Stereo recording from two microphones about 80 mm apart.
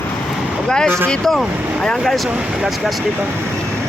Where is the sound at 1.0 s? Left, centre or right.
Centre.